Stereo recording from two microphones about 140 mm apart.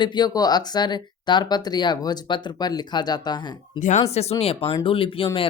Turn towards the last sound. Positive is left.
turn(degrees=40)  # may be behind; listen again after turning